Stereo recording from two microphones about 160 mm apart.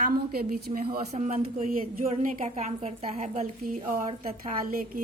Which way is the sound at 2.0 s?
55° right (ahead or behind).